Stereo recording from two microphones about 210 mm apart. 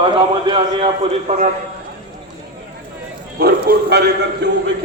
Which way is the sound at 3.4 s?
45° right (ahead or behind).